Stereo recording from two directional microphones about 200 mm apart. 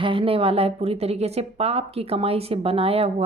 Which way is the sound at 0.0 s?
25° right (ahead or behind).